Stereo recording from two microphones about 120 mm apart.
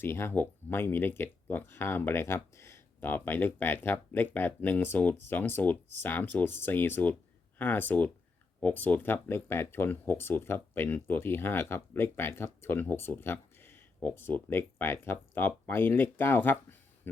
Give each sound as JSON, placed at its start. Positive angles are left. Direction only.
{"t": 0.0, "sound": "speech", "side_deg": 20}